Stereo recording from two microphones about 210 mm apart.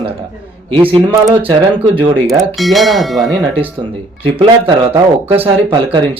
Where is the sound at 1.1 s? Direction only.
10° right (ahead or behind).